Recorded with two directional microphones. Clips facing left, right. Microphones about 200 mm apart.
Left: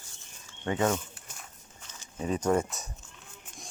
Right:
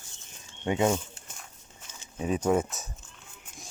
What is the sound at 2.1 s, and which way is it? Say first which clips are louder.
Speech: right 1 dB; 10° right (ahead or behind).